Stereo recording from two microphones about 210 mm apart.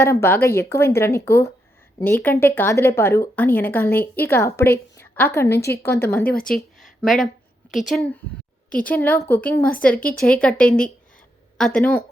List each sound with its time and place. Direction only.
0.0 s speech: 10° left (ahead or behind)
5.5 s speech: 50° left (ahead or behind)
5.8 s speech: 10° left (ahead or behind)
6.3 s speech: 45° left (ahead or behind)
6.7 s a sound: centre (ahead or behind)
7.9 s speech: centre (ahead or behind)